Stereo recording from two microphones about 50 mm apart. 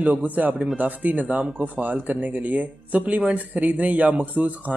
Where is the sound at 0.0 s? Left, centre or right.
Right.